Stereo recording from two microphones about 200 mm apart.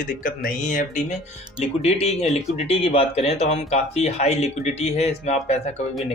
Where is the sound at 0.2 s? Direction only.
45° left (ahead or behind).